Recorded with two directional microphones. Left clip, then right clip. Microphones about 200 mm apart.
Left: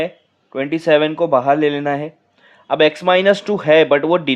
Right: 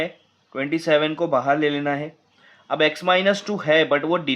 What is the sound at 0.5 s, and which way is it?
Speech, 30° left (ahead or behind).